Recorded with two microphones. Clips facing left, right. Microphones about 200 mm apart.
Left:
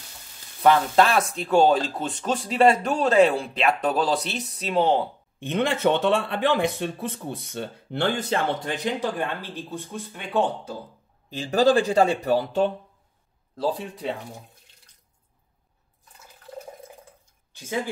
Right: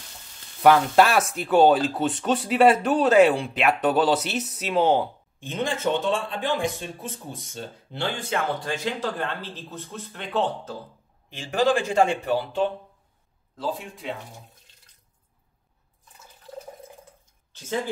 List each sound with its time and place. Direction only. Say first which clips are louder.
0.6 s speech: right 1 dB; 5° right (ahead or behind)
5.4 s a man's voice: left 4 dB; 65° left (ahead or behind)
8.5 s speech: left 1 dB; 20° left (ahead or behind)
11.2 s speech: left 3 dB; 35° left (ahead or behind)
17.5 s a sound: right 2 dB; 10° left (ahead or behind)